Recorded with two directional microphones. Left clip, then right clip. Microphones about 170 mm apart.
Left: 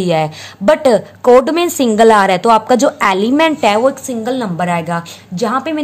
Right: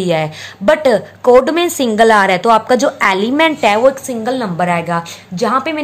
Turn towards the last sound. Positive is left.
turn(degrees=10)  # may be behind; listen again after turning